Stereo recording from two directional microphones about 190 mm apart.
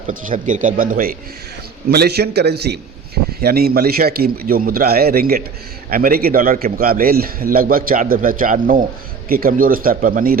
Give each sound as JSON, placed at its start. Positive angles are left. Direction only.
{"t": 0.1, "sound": "a man's voice", "side_deg": -45}
{"t": 1.9, "sound": "a man's voice", "side_deg": -55}